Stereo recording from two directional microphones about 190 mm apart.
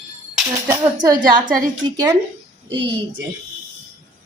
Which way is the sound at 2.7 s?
70° right (ahead or behind).